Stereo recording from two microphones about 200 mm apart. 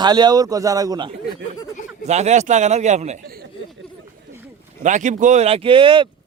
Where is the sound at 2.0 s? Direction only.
35° right (ahead or behind).